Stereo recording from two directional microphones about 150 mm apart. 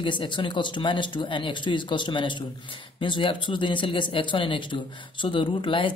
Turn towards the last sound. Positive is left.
turn(degrees=35)  # may be behind; listen again after turning